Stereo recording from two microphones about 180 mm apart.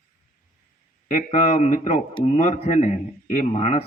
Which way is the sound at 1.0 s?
40° left (ahead or behind).